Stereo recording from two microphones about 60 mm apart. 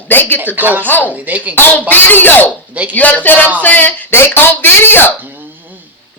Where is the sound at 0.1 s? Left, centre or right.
Left.